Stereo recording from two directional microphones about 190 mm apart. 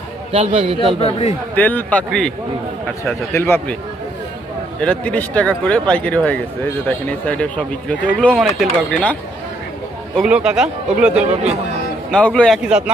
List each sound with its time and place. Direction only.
0.3 s a man's voice: 30° right (ahead or behind)
0.9 s a man's voice: 30° left (ahead or behind)
1.5 s speech: 10° left (ahead or behind)
4.8 s a man's voice: 5° left (ahead or behind)
10.2 s a man's voice: 5° right (ahead or behind)